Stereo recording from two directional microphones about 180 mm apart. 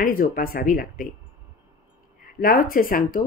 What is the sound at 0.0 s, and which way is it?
A woman's voice, 50° left (ahead or behind).